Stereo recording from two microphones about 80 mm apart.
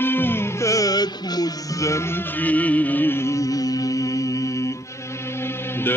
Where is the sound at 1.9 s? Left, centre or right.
Left.